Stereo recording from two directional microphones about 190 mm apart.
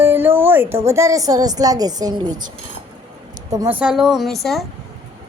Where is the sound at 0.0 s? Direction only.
10° right (ahead or behind).